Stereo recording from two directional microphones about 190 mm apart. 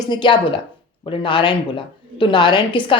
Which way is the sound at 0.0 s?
25° left (ahead or behind).